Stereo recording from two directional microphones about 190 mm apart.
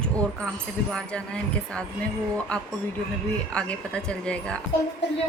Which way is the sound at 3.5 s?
5° left (ahead or behind).